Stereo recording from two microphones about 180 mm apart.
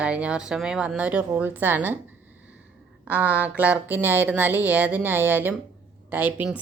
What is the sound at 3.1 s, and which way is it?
A woman's voice, 10° right (ahead or behind).